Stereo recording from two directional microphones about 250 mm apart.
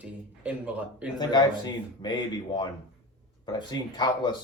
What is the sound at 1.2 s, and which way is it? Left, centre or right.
Speech, centre.